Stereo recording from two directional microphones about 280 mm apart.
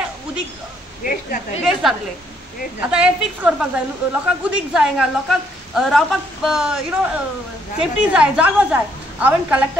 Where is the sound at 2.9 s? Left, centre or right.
Centre.